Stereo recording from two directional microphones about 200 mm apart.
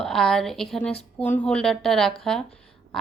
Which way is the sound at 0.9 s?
30° left (ahead or behind).